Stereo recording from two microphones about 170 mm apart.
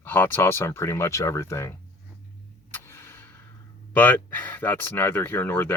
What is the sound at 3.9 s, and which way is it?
Speech, 10° left (ahead or behind).